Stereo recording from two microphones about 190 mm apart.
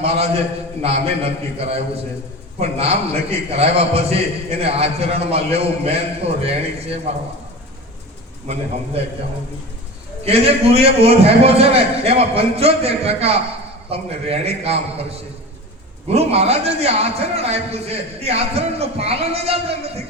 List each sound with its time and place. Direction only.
0.0 s a man's voice: 35° right (ahead or behind)
10.2 s a man's voice: 30° right (ahead or behind)
16.0 s a man's voice: 30° right (ahead or behind)